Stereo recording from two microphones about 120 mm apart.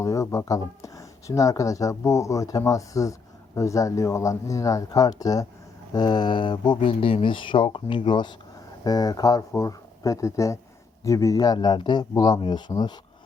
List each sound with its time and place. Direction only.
0.0 s speech: 25° left (ahead or behind)